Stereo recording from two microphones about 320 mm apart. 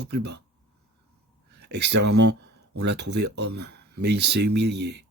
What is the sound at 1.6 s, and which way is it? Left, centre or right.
Speech, right.